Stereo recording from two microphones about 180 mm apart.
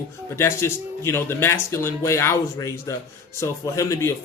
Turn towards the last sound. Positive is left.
turn(degrees=15)  # may be behind; listen again after turning